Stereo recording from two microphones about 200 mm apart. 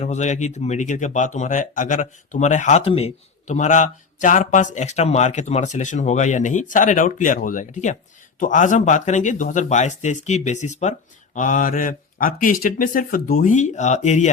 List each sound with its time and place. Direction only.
0.0 s speech: 35° left (ahead or behind)